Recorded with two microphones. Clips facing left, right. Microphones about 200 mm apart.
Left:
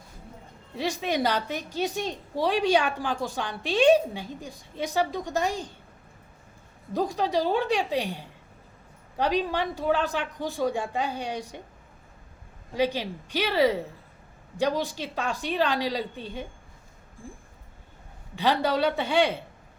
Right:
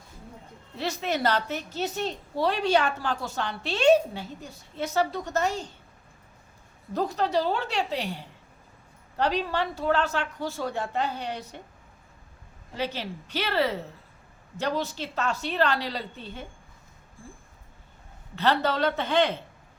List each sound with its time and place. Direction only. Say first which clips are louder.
0.8 s a woman's voice: left 1 dB; 15° left (ahead or behind)
6.9 s a woman's voice: even; 15° left (ahead or behind)
12.7 s a woman's voice: left 5 dB; 15° left (ahead or behind)
18.3 s a woman's voice: left 1 dB; 10° left (ahead or behind)